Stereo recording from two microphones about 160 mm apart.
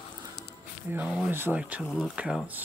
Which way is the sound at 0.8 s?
10° right (ahead or behind).